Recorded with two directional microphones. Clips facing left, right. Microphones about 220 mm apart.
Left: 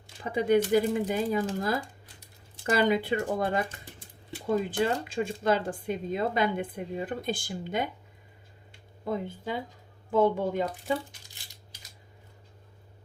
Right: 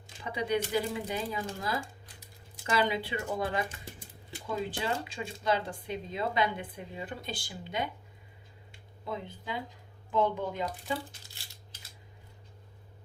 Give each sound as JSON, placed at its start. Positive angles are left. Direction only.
{"t": 0.3, "sound": "speech", "side_deg": 50}
{"t": 4.7, "sound": "speech", "side_deg": 50}
{"t": 9.0, "sound": "speech", "side_deg": 50}